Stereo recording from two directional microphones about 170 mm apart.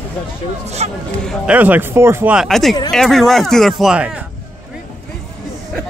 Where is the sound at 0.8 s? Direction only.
40° right (ahead or behind).